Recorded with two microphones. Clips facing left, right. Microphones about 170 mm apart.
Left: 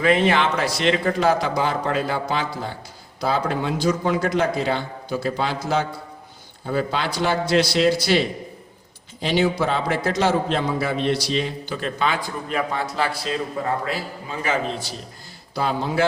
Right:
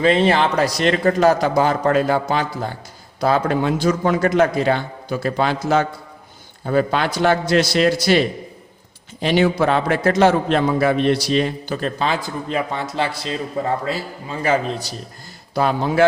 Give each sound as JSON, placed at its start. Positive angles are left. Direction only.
{"t": 0.0, "sound": "a man's voice", "side_deg": -30}
{"t": 9.2, "sound": "a man's voice", "side_deg": -55}
{"t": 13.8, "sound": "a man's voice", "side_deg": -35}
{"t": 15.5, "sound": "a man's voice", "side_deg": -55}